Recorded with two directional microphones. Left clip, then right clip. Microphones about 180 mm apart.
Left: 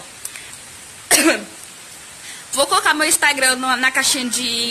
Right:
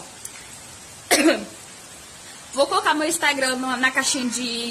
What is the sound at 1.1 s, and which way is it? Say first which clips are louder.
Cough: left 3 dB; centre (ahead or behind).